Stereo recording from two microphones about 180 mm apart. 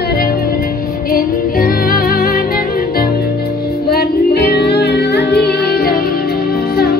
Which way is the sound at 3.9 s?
60° left (ahead or behind).